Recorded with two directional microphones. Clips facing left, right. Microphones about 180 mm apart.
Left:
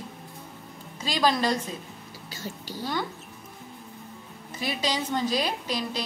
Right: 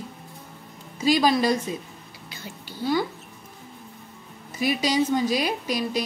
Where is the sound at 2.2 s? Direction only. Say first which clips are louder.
Left 3 dB; 40° left (ahead or behind).